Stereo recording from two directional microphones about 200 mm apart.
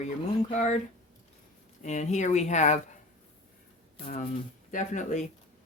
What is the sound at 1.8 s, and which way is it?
Speech, 35° left (ahead or behind).